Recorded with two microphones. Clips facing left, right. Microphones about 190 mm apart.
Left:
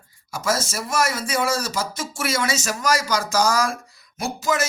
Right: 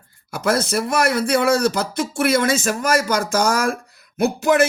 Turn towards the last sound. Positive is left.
turn(degrees=-60)  # may be behind; listen again after turning